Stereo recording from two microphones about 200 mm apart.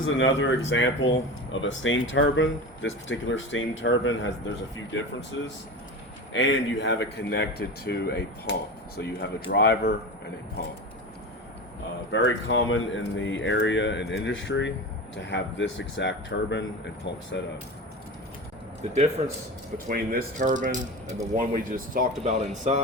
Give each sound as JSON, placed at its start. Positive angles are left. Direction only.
{"t": 0.0, "sound": "speech", "side_deg": 70}
{"t": 12.1, "sound": "speech", "side_deg": 70}
{"t": 18.8, "sound": "speech", "side_deg": -30}
{"t": 19.9, "sound": "speech", "side_deg": -45}